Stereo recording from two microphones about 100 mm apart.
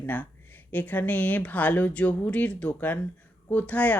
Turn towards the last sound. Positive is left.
turn(degrees=15)  # may be behind; listen again after turning